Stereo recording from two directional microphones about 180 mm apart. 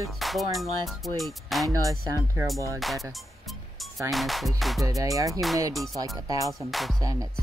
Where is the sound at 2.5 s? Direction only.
15° right (ahead or behind).